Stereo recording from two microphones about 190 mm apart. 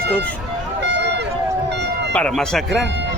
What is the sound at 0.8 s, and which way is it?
Run, 65° right (ahead or behind).